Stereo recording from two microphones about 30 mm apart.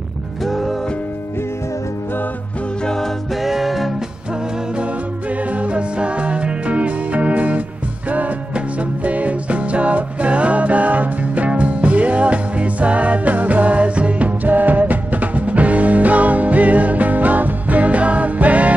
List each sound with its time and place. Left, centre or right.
0.5 s music: centre
3.4 s music: centre
5.5 s music: right
14.4 s music: right